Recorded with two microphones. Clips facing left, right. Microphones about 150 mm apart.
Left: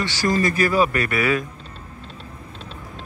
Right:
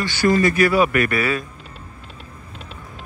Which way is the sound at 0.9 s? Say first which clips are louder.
Right 1 dB; 25° left (ahead or behind).